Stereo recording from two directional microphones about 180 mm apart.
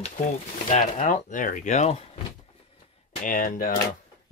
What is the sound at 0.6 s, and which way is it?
Speech, 40° left (ahead or behind).